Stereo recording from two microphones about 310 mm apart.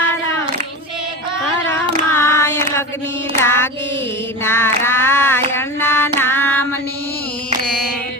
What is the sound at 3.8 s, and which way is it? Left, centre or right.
Mantra, left.